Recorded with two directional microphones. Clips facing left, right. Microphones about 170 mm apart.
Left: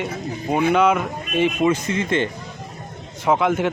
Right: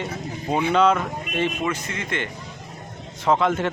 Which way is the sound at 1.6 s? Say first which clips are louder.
Left 8 dB; 20° left (ahead or behind).